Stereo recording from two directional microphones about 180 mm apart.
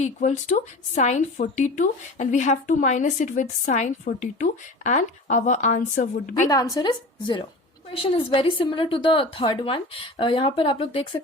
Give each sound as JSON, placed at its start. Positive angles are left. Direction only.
{"t": 0.0, "sound": "a woman's voice", "side_deg": 40}
{"t": 6.5, "sound": "a woman's voice", "side_deg": 20}